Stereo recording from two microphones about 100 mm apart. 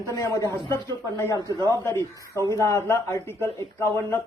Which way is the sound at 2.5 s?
30° left (ahead or behind).